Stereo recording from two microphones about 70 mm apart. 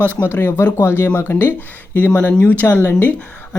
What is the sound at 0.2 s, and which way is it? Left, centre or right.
Speech, left.